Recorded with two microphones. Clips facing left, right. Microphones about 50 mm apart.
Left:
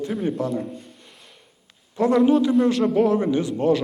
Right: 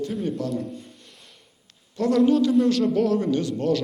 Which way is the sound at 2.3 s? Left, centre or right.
Centre.